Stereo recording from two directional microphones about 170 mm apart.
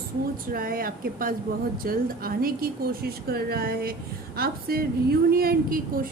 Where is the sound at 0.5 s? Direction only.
55° right (ahead or behind).